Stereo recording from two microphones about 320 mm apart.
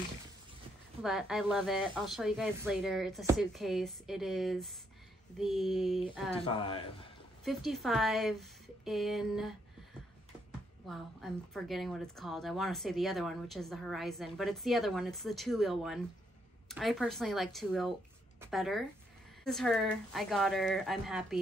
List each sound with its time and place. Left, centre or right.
1.0 s a woman's voice: centre
6.4 s speech: centre
7.4 s a woman's voice: centre
10.9 s a woman's voice: centre